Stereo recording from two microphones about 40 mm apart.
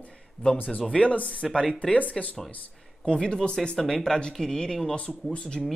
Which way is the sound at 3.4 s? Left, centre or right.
Left.